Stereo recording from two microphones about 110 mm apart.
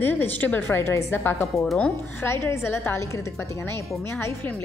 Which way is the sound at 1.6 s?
10° left (ahead or behind).